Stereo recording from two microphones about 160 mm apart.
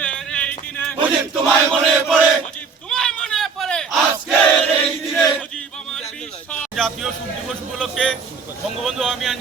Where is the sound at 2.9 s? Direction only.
5° left (ahead or behind).